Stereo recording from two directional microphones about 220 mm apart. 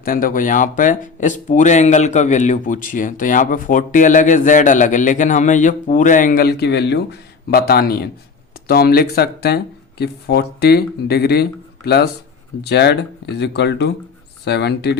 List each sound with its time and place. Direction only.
0.0 s speech: 40° left (ahead or behind)